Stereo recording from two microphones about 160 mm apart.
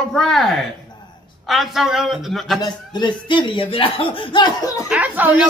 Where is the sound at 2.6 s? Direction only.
25° left (ahead or behind).